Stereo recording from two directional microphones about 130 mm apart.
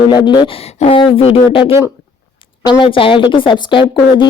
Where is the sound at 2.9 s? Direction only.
40° left (ahead or behind).